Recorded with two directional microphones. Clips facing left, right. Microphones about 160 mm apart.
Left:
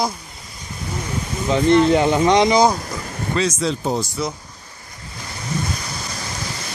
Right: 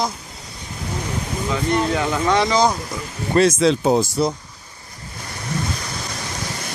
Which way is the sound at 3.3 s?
55° right (ahead or behind).